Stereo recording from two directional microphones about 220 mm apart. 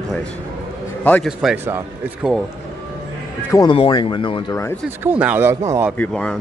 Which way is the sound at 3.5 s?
25° left (ahead or behind).